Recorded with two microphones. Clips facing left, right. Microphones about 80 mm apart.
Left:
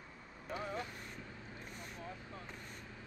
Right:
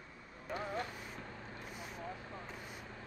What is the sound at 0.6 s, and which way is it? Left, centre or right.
Vehicle, right.